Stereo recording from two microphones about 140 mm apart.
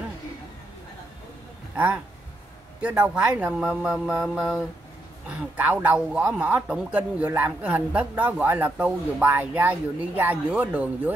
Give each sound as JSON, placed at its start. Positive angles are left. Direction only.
{"t": 2.8, "sound": "speech", "side_deg": -10}
{"t": 4.1, "sound": "mantra", "side_deg": -5}
{"t": 5.3, "sound": "speech", "side_deg": -10}